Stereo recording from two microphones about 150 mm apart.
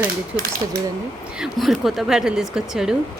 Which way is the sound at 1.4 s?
Centre (ahead or behind).